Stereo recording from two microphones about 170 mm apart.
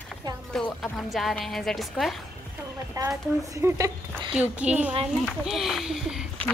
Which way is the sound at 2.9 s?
20° right (ahead or behind).